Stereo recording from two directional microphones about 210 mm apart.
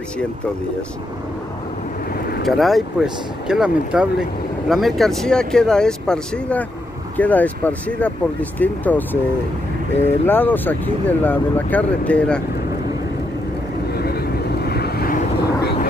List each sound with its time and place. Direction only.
2.4 s speech: centre (ahead or behind)
10.2 s speech: 10° left (ahead or behind)
13.9 s vehicle: 50° left (ahead or behind)